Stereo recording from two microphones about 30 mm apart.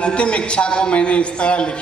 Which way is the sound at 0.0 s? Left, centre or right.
Left.